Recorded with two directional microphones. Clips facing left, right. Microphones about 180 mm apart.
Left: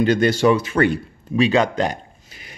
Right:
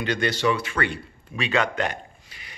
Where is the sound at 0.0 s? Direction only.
45° left (ahead or behind).